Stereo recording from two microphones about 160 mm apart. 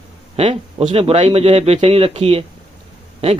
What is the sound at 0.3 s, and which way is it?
Speech, 40° right (ahead or behind).